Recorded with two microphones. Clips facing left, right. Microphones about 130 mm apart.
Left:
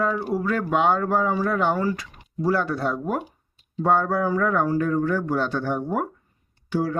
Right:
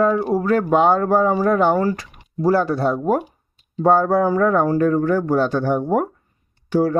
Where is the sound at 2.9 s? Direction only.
45° right (ahead or behind).